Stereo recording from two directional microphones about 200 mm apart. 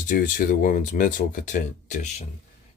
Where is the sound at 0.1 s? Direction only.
40° left (ahead or behind).